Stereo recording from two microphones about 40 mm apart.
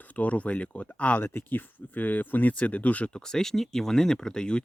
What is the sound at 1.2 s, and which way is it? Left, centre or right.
Speech, left.